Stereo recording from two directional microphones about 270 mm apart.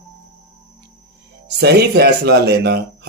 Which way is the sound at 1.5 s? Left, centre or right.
Right.